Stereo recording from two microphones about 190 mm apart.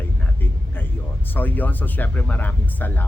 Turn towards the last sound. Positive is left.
turn(degrees=10)  # may be behind; listen again after turning